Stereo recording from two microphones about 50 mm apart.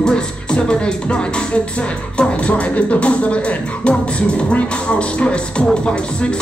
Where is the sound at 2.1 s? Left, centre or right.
Left.